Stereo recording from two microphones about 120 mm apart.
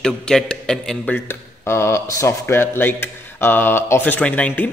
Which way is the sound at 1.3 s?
20° left (ahead or behind).